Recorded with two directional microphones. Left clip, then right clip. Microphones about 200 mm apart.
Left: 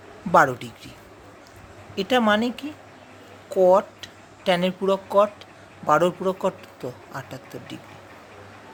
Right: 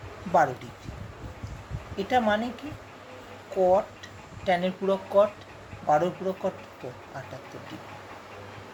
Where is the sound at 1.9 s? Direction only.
45° left (ahead or behind).